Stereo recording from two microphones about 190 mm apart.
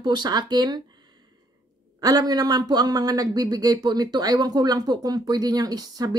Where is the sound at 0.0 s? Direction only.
25° right (ahead or behind).